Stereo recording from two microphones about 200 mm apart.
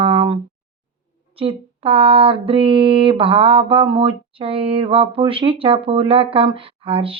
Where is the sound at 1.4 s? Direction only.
25° right (ahead or behind).